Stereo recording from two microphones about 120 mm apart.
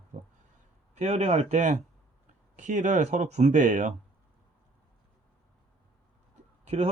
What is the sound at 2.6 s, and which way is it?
Speech, 90° right.